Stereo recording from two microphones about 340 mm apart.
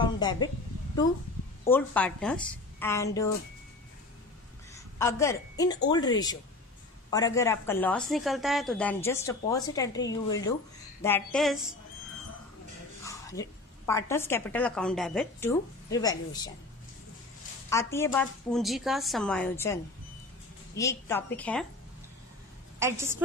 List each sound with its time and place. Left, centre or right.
0.0 s speech: centre
1.7 s a woman's voice: centre
4.9 s a woman's voice: centre
13.0 s a woman's voice: centre
17.6 s a woman's voice: centre
22.8 s a woman's voice: centre